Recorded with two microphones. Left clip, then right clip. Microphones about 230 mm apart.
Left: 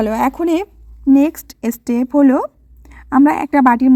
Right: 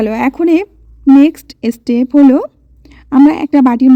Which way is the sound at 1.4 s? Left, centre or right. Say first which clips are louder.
Right 4 dB; centre.